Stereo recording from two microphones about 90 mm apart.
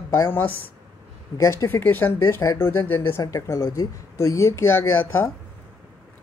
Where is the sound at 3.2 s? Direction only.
40° left (ahead or behind).